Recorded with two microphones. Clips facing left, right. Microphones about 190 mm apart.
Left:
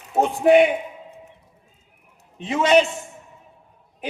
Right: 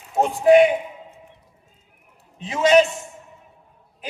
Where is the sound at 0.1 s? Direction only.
65° left (ahead or behind).